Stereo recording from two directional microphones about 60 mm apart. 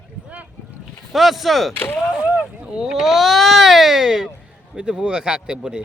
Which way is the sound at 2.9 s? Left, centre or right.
Centre.